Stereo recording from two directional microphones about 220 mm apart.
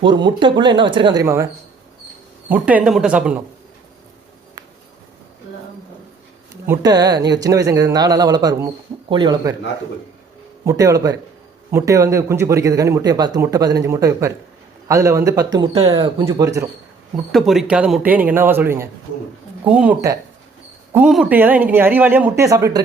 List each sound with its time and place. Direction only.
0.0 s speech: 20° right (ahead or behind)
2.5 s speech: 5° right (ahead or behind)
6.7 s speech: 15° right (ahead or behind)
10.7 s speech: 15° right (ahead or behind)
17.3 s speech: centre (ahead or behind)